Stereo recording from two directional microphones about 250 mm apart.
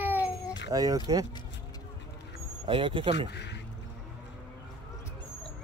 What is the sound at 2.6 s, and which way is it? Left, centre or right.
Speech, right.